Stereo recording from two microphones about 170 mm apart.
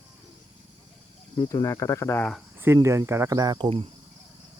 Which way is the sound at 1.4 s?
20° left (ahead or behind).